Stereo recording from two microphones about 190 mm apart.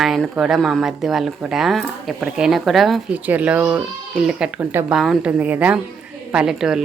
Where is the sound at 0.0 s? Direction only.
Centre (ahead or behind).